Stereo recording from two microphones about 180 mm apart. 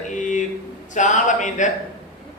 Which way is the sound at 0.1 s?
45° left (ahead or behind).